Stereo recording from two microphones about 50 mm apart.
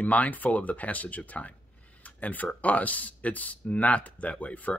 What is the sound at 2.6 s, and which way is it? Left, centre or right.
Speech, left.